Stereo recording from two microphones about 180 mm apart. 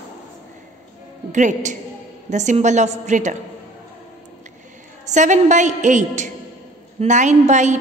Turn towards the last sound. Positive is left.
turn(degrees=-40)  # may be behind; listen again after turning